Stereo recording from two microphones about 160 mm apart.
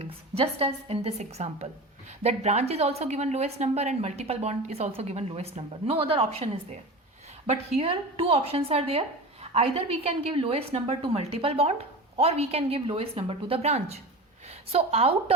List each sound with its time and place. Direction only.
0.0 s a woman's voice: 40° right (ahead or behind)